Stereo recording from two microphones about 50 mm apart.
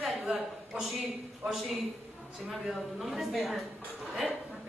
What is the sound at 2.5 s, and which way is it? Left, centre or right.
A woman's voice, centre.